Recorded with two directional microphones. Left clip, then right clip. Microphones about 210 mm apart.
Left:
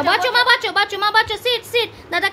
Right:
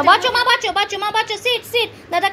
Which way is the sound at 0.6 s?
40° left (ahead or behind).